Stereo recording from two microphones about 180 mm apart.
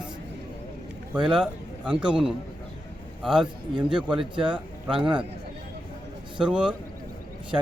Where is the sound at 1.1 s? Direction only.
5° right (ahead or behind).